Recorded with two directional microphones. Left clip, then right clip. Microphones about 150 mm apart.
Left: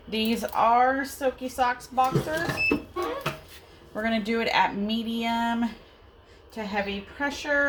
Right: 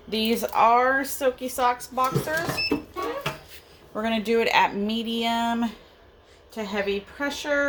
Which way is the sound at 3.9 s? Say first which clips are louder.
Right 3 dB; 40° right (ahead or behind).